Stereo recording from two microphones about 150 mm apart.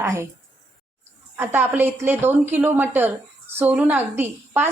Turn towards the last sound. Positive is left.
turn(degrees=-15)  # may be behind; listen again after turning